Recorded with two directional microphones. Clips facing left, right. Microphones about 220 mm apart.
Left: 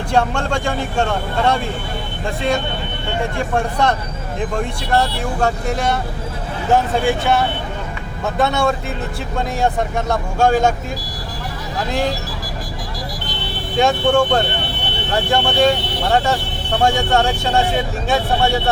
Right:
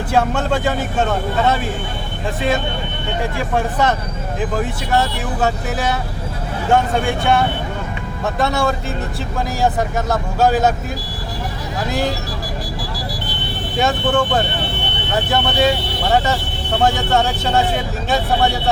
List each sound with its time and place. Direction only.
0.1 s speech: 5° right (ahead or behind)
3.3 s speech: 5° right (ahead or behind)
13.7 s speech: 5° right (ahead or behind)